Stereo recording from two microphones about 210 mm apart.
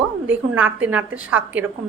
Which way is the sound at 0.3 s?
5° right (ahead or behind).